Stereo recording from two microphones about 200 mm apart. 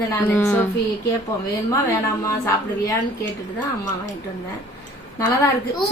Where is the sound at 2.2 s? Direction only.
15° left (ahead or behind).